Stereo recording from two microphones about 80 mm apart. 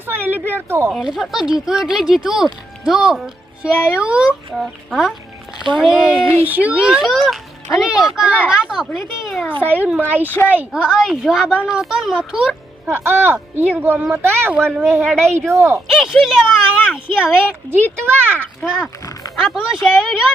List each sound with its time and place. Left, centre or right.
0.0 s a sound: right
1.0 s speech: centre
6.4 s speech: right
8.7 s a child's voice: centre
9.6 s speech: right
10.7 s speech: centre
12.8 s speech: right
15.0 s speech: centre
15.4 s speech: right
15.9 s speech: centre
18.0 s speech: right
18.6 s speech: centre